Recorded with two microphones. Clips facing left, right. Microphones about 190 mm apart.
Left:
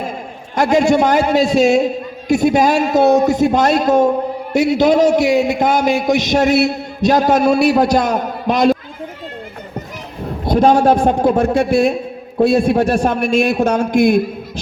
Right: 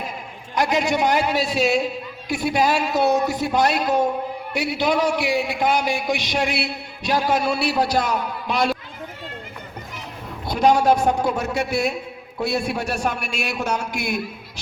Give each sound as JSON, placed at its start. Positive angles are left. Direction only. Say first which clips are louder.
{"t": 0.5, "sound": "a man's voice", "louder": "left 8 dB", "side_deg": 50}
{"t": 10.4, "sound": "a man's voice", "louder": "left 6 dB", "side_deg": 55}